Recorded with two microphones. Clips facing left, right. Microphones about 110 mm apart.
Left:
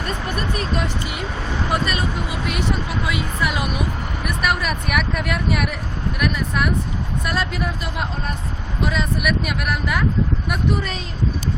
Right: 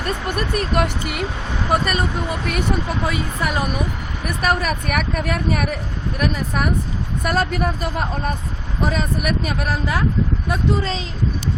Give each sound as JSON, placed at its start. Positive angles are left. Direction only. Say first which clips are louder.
{"t": 0.3, "sound": "speech", "louder": "right 3 dB", "side_deg": -60}
{"t": 1.7, "sound": "speech", "louder": "right 4 dB", "side_deg": -50}